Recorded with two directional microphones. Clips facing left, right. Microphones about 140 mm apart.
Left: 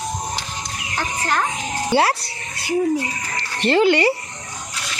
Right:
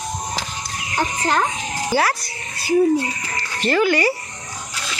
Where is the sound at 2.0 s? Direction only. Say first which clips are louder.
Left 2 dB; 30° left (ahead or behind).